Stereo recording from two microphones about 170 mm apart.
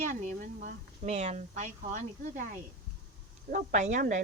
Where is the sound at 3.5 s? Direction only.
55° right (ahead or behind).